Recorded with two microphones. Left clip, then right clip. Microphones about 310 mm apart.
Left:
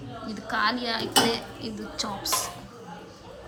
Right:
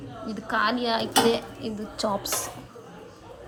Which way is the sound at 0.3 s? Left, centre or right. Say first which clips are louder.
Right 1 dB; centre.